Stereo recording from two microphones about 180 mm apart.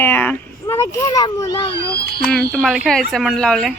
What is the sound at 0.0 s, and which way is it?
Speech, 10° left (ahead or behind).